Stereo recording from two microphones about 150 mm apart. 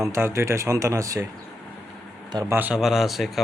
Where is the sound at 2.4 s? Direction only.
10° right (ahead or behind).